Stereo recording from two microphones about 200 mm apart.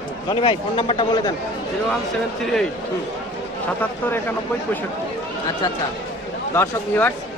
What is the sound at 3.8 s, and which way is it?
Speech, 10° left (ahead or behind).